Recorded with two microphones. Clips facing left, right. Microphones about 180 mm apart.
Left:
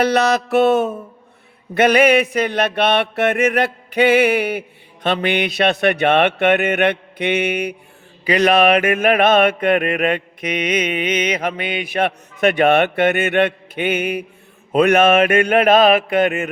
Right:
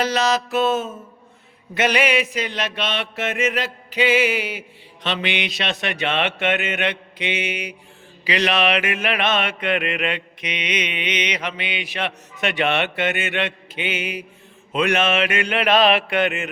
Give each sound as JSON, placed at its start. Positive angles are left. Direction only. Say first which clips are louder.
{"t": 0.0, "sound": "mantra", "louder": "left 5 dB", "side_deg": 60}
{"t": 1.7, "sound": "mantra", "louder": "left 7 dB", "side_deg": 55}